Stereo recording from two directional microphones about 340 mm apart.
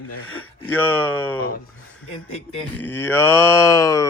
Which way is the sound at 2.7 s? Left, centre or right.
Centre.